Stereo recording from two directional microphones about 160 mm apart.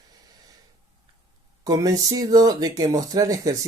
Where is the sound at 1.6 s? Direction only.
20° right (ahead or behind).